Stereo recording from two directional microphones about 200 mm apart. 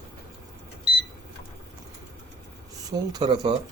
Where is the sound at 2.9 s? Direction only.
20° right (ahead or behind).